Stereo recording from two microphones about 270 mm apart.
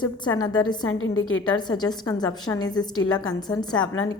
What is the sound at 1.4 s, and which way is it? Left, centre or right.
A woman's voice, centre.